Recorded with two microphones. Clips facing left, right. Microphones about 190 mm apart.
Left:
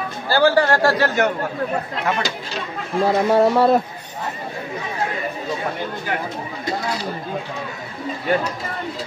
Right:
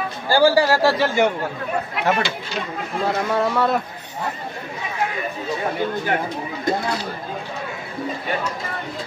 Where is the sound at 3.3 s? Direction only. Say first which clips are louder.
Left 6 dB; 35° left (ahead or behind).